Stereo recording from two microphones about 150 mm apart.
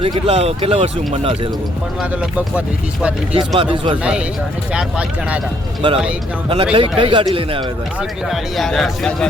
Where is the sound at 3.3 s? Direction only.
35° right (ahead or behind).